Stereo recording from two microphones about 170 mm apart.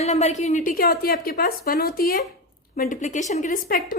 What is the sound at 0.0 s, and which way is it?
A woman's voice, 40° left (ahead or behind).